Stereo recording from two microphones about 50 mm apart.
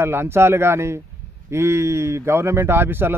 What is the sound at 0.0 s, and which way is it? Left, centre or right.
Speech, right.